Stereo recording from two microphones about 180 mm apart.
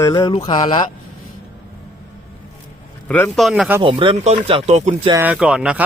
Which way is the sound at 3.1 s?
5° left (ahead or behind).